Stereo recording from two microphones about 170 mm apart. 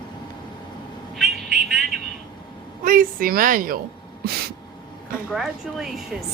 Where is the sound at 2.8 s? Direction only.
55° right (ahead or behind).